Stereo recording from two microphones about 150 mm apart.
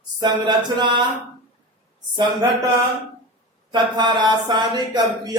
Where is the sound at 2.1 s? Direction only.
30° right (ahead or behind).